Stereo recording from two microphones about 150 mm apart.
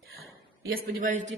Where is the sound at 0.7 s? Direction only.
80° right.